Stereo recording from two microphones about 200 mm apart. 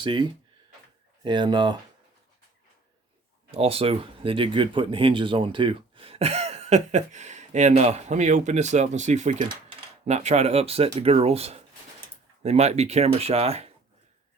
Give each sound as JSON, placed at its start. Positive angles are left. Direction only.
{"t": 0.0, "sound": "speech", "side_deg": -25}
{"t": 3.5, "sound": "speech", "side_deg": -30}